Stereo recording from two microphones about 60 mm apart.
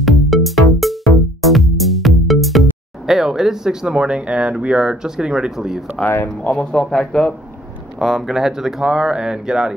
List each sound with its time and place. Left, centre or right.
0.0 s music: centre
6.0 s speech: left
6.5 s speech: centre
8.0 s speech: centre